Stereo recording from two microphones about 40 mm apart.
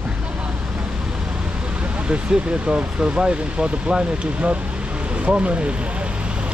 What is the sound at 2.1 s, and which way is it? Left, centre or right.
Speech, right.